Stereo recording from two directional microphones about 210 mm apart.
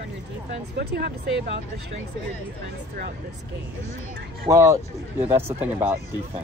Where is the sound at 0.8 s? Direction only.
50° right (ahead or behind).